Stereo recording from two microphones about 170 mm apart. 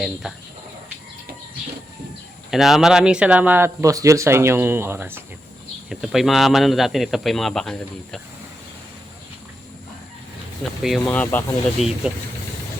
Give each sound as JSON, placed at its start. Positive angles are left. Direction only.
{"t": 0.0, "sound": "speech", "side_deg": 0}
{"t": 2.5, "sound": "speech", "side_deg": 0}
{"t": 5.9, "sound": "speech", "side_deg": -5}
{"t": 10.6, "sound": "speech", "side_deg": 0}
{"t": 11.8, "sound": "speech", "side_deg": 40}